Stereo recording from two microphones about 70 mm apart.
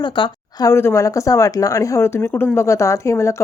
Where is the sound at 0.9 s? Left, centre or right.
Left.